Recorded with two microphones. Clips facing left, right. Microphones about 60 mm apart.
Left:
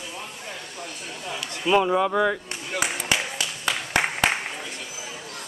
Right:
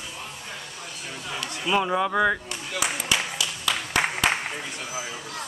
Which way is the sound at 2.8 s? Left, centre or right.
Left.